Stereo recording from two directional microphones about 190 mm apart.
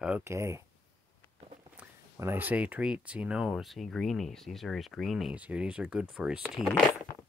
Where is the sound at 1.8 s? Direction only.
10° right (ahead or behind).